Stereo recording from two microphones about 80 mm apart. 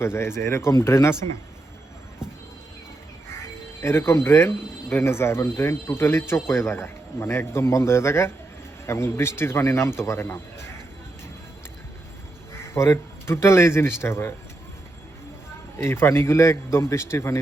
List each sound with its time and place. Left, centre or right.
0.0 s speech: left
3.8 s speech: left
12.7 s speech: left
15.8 s speech: left